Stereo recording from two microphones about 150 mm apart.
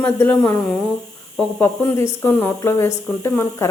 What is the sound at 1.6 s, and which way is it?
Speech, 15° left (ahead or behind).